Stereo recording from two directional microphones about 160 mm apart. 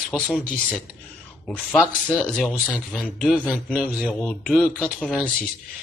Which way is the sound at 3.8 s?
10° left (ahead or behind).